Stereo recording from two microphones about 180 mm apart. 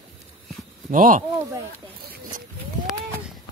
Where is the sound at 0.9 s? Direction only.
45° right (ahead or behind).